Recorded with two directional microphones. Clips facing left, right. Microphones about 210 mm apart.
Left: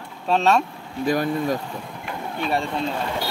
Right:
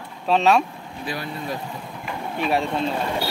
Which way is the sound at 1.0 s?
45° left (ahead or behind).